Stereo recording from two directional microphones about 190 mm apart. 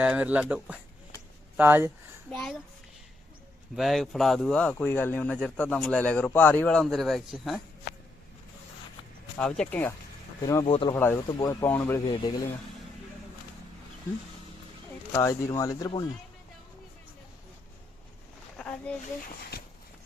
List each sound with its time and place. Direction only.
0.0 s speech: 5° right (ahead or behind)
2.3 s speech: centre (ahead or behind)
3.8 s speech: centre (ahead or behind)
9.4 s speech: 5° left (ahead or behind)
10.4 s speech: 20° left (ahead or behind)
10.9 s speech: 10° left (ahead or behind)
15.1 s speech: 15° left (ahead or behind)
18.5 s a sound: 5° left (ahead or behind)